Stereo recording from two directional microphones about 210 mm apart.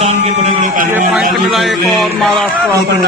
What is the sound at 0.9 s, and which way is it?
Speech, centre (ahead or behind).